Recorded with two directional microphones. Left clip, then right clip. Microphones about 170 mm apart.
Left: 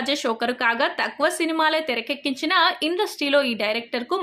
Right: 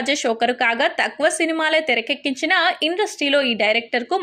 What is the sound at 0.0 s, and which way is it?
A woman's voice, 5° right (ahead or behind).